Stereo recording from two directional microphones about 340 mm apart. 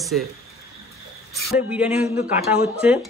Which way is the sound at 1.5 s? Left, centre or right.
Centre.